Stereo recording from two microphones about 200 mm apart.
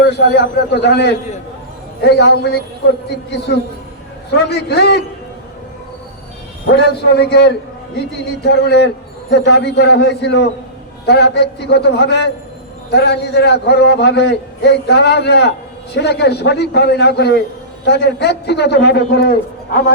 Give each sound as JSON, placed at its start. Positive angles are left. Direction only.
{"t": 0.0, "sound": "a man's voice", "side_deg": 55}
{"t": 6.7, "sound": "a man's voice", "side_deg": 55}